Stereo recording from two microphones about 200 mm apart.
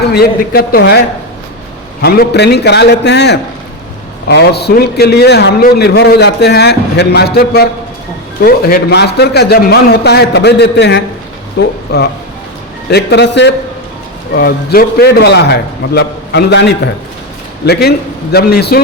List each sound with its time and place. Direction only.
0.1 s a man's voice: 50° left (ahead or behind)
2.0 s a man's voice: 55° left (ahead or behind)
12.9 s a man's voice: 55° left (ahead or behind)